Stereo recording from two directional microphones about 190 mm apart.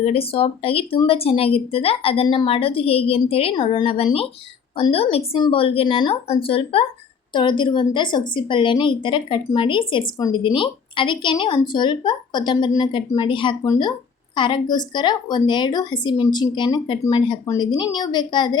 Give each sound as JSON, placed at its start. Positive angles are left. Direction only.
{"t": 0.0, "sound": "a woman's voice", "side_deg": 30}